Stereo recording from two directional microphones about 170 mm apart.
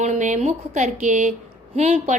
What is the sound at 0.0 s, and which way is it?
Speech, 45° right (ahead or behind).